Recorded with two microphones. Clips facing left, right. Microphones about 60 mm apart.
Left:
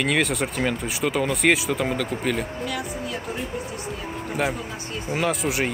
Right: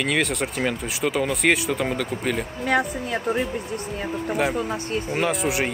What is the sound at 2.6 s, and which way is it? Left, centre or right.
Speech, right.